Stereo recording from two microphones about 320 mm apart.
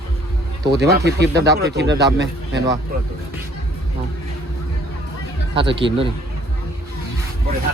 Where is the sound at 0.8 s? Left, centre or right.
Right.